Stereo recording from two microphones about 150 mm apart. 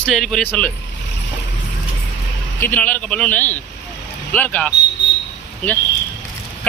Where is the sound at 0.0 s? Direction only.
5° left (ahead or behind).